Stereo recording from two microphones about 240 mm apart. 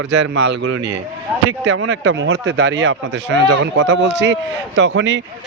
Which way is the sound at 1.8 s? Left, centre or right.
Right.